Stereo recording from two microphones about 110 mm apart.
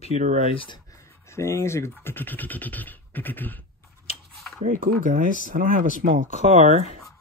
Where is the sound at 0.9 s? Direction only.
25° left (ahead or behind).